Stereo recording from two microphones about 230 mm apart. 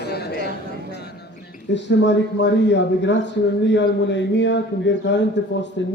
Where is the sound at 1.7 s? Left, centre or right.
Left.